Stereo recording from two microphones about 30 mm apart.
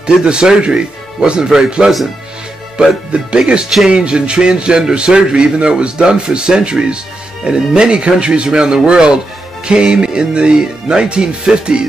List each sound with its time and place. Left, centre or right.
0.3 s a man's voice: right
1.4 s music: right
3.1 s a man's voice: right
8.5 s music: right
11.1 s a man's voice: right